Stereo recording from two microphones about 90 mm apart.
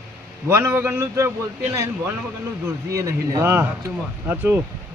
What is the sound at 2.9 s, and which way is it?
Speech, 35° right (ahead or behind).